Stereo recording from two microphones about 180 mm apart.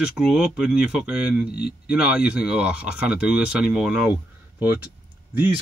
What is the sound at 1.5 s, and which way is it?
Speech, 60° left (ahead or behind).